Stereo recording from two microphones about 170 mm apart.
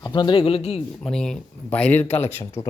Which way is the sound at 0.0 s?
25° left (ahead or behind).